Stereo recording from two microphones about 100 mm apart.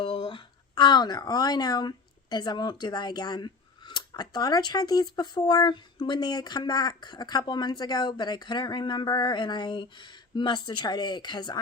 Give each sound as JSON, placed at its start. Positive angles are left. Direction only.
{"t": 0.0, "sound": "speech", "side_deg": 60}